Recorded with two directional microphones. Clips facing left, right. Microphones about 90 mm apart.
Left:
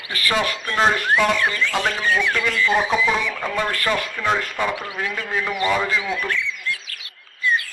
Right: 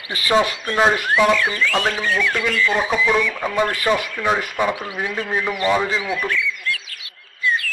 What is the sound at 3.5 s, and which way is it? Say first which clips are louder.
A man's voice: right 4 dB; 15° right (ahead or behind).